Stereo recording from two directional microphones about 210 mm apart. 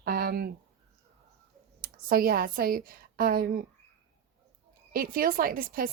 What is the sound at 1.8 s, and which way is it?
A woman's voice, 45° right (ahead or behind).